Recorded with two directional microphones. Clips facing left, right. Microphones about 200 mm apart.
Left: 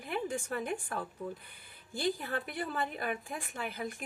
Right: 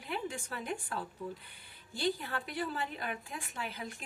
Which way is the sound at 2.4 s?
50° left (ahead or behind).